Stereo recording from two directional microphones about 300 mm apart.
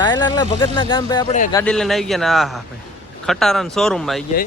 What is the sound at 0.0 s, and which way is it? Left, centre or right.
Speech, centre.